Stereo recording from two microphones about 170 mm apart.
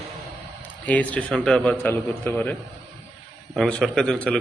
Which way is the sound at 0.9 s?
10° left (ahead or behind).